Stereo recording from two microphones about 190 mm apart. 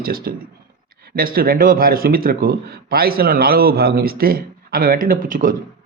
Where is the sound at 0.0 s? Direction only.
50° right (ahead or behind).